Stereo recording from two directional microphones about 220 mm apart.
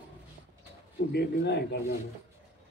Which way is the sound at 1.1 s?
50° left (ahead or behind).